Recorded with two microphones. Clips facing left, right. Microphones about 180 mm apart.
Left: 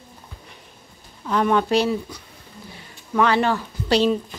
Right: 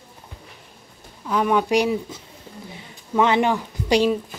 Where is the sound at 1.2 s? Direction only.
5° right (ahead or behind).